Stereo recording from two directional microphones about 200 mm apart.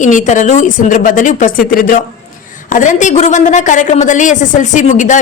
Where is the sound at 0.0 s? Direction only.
40° left (ahead or behind).